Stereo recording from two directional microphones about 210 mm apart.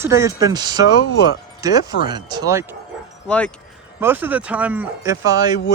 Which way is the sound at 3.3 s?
5° left (ahead or behind).